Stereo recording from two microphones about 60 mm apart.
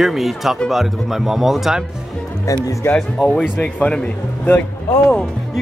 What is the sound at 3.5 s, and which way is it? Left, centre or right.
Speech, left.